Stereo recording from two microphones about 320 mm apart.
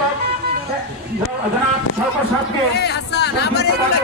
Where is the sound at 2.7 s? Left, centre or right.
Left.